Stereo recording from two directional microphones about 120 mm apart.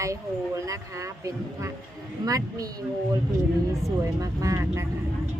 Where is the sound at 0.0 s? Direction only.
25° right (ahead or behind).